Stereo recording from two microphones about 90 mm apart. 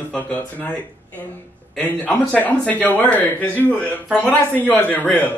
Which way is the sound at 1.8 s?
15° left (ahead or behind).